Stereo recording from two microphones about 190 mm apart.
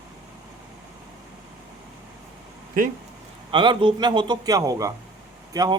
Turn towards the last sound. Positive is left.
turn(degrees=-20)  # may be behind; listen again after turning